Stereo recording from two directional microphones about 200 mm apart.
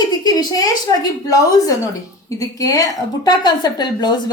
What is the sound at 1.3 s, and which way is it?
A woman's voice, 15° left (ahead or behind).